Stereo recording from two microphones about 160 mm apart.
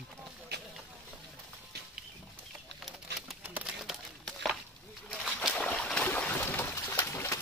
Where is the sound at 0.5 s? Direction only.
90° right.